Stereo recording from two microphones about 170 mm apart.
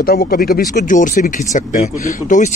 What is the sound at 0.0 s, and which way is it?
Speech, 60° left (ahead or behind).